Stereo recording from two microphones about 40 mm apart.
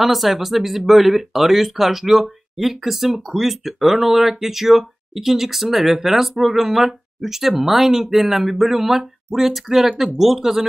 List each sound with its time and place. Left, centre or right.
0.0 s speech: centre